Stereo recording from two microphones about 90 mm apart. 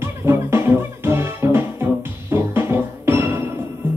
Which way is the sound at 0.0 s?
30° right (ahead or behind).